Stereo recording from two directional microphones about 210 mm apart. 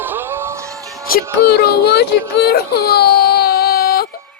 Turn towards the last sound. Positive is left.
turn(degrees=45)  # may be behind; listen again after turning